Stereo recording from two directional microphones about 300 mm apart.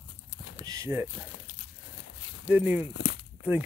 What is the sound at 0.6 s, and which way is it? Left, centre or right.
Speech, centre.